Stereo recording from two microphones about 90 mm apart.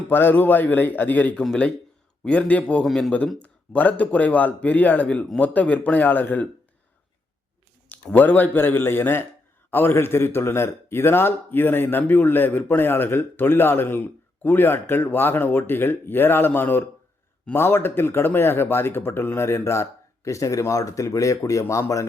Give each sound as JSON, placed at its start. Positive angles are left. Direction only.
{"t": 0.1, "sound": "a man's voice", "side_deg": 25}
{"t": 2.8, "sound": "speech", "side_deg": 5}
{"t": 3.4, "sound": "speech", "side_deg": 15}
{"t": 7.9, "sound": "a man's voice", "side_deg": 20}